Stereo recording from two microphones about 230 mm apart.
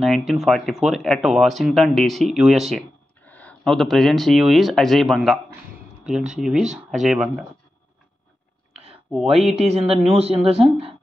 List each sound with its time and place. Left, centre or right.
0.0 s speech: centre
9.1 s speech: centre
9.6 s speech: right